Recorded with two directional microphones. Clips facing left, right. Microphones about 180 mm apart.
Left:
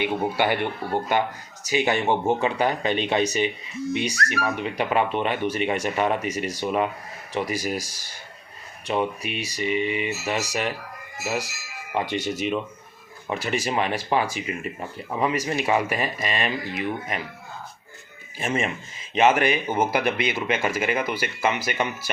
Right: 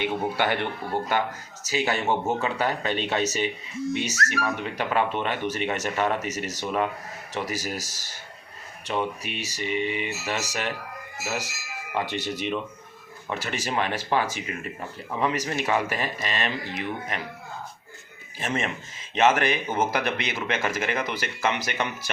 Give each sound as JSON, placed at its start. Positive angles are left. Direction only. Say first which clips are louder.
{"t": 0.0, "sound": "speech", "louder": "left 2 dB", "side_deg": 10}
{"t": 11.9, "sound": "speech", "louder": "left 3 dB", "side_deg": 10}
{"t": 13.2, "sound": "speech", "louder": "left 4 dB", "side_deg": 15}
{"t": 18.3, "sound": "speech", "louder": "left 3 dB", "side_deg": 10}